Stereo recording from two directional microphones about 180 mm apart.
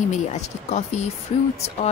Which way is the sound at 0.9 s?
40° left (ahead or behind).